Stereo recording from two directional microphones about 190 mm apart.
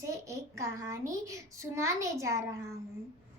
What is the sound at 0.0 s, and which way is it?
A child's voice, 15° right (ahead or behind).